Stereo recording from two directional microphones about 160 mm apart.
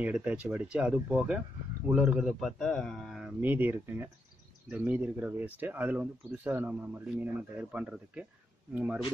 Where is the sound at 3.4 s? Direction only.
10° right (ahead or behind).